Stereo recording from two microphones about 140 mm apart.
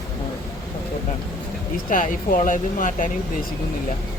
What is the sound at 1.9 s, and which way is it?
Speech, 75° left (ahead or behind).